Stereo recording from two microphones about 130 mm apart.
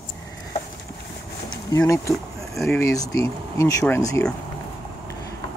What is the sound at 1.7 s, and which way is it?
Speech, 25° left (ahead or behind).